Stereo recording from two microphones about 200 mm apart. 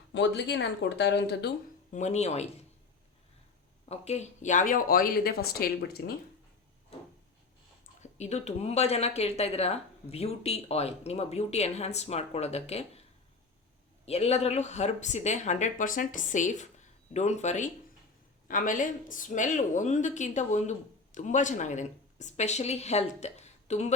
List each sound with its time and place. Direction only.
0.1 s speech: 60° left (ahead or behind)
1.9 s speech: 35° left (ahead or behind)
3.8 s speech: 35° left (ahead or behind); by 6.1 s 50° left (ahead or behind)
8.0 s speech: 35° left (ahead or behind)
14.0 s speech: 30° left (ahead or behind)